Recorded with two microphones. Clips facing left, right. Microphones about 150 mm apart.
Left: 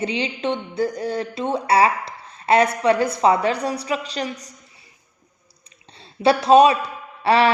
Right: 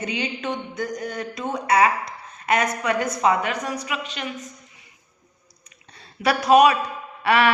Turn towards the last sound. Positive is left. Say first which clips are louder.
# left 2 dB
turn(degrees=30)  # may be behind; listen again after turning